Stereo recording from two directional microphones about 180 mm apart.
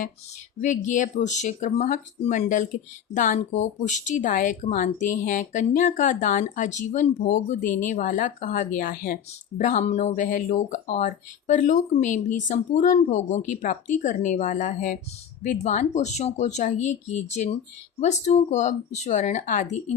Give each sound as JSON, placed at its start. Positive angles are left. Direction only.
{"t": 0.6, "sound": "speech", "side_deg": 45}